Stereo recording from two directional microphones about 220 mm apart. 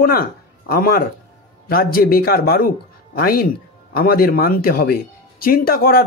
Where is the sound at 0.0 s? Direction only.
45° left (ahead or behind).